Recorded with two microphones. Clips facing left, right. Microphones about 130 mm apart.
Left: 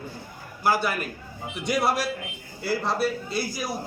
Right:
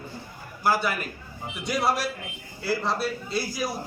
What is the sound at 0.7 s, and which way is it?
A man's voice, centre (ahead or behind).